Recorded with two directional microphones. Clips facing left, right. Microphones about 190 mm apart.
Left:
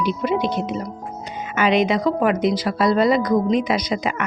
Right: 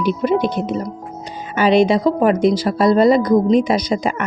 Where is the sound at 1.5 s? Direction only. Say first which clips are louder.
Right 5 dB; 35° right (ahead or behind).